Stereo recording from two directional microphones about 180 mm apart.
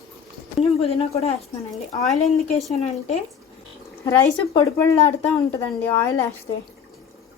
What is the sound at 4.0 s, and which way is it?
Speech, 15° left (ahead or behind).